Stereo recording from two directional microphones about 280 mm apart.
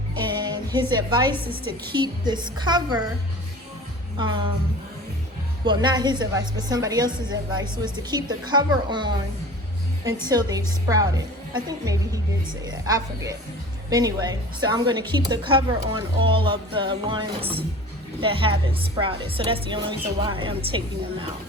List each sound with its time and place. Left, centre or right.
0.1 s music: centre
1.5 s a woman's voice: centre
4.2 s a woman's voice: centre
5.6 s a woman's voice: centre